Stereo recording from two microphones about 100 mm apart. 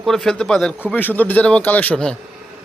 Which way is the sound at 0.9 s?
20° left (ahead or behind).